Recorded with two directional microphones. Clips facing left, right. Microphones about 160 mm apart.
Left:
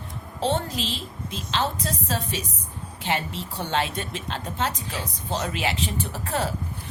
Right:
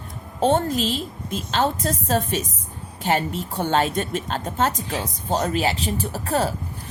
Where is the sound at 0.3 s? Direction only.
50° right (ahead or behind).